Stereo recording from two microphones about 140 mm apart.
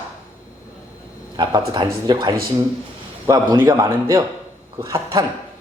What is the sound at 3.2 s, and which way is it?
Speech, 25° right (ahead or behind).